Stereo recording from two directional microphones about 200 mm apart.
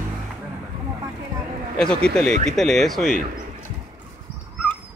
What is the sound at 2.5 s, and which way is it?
Speech, centre (ahead or behind).